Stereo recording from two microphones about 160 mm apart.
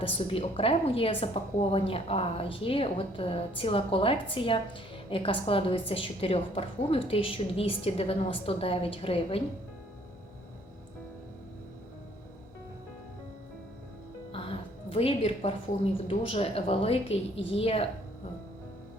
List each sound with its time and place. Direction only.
0.0 s a woman's voice: 35° left (ahead or behind)
14.3 s a woman's voice: 35° left (ahead or behind)